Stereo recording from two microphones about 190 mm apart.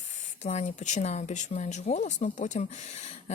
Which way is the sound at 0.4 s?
35° left (ahead or behind).